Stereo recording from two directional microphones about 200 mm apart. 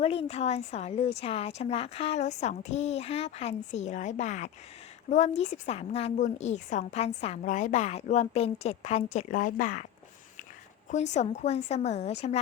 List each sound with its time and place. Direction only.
0.0 s a woman's voice: 30° left (ahead or behind)
10.9 s a woman's voice: 35° left (ahead or behind)